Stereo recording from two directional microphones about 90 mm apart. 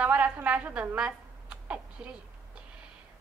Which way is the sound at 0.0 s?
15° right (ahead or behind).